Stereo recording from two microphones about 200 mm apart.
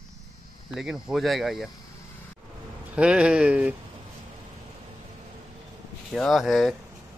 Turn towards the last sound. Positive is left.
turn(degrees=0)  # may be behind; listen again after turning